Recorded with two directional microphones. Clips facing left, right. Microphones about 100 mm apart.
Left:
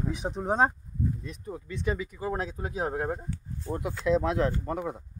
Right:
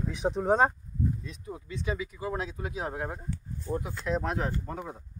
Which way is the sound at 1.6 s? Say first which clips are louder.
Left 2 dB; 50° left (ahead or behind).